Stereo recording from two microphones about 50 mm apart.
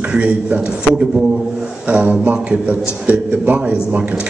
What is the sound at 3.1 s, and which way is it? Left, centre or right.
A man's voice, right.